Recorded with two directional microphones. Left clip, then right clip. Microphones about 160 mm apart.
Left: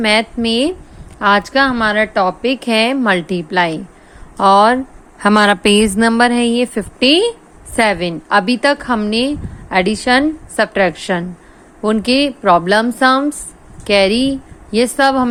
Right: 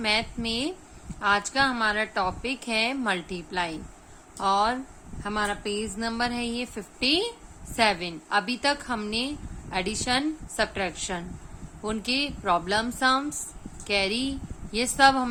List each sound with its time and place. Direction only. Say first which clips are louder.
0.0 s a woman's voice: left 12 dB; 35° left (ahead or behind)
5.2 s a woman's voice: left 18 dB; 65° left (ahead or behind); by 15.3 s 30° left (ahead or behind)